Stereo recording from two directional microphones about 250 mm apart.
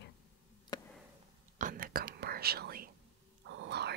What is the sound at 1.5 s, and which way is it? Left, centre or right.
Whispering, right.